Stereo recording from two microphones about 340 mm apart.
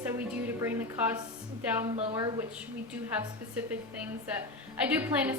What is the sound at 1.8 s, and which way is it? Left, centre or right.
Speech, centre.